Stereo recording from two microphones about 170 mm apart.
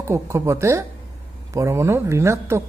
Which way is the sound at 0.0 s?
15° right (ahead or behind).